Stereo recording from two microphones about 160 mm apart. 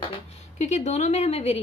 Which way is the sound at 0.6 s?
45° left (ahead or behind).